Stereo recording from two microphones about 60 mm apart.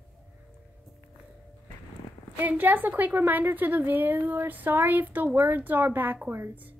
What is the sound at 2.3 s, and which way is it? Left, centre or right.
A woman's voice, right.